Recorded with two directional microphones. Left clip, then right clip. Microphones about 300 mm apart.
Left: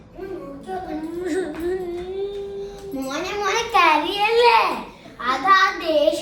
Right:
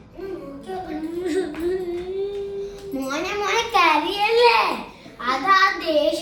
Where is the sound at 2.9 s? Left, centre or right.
Centre.